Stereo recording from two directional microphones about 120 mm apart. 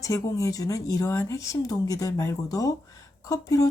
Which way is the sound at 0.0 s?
25° left (ahead or behind).